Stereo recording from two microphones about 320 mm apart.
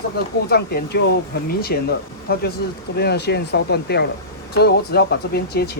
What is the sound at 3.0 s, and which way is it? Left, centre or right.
Speech, left.